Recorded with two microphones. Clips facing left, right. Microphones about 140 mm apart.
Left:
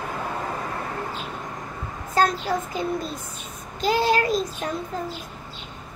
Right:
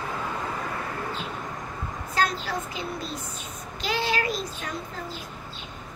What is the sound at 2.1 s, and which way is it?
A woman's voice, 45° left (ahead or behind).